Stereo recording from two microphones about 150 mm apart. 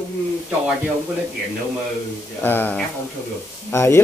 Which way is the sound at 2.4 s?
10° left (ahead or behind).